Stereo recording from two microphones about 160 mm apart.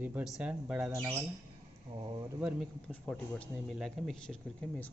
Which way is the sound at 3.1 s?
5° left (ahead or behind).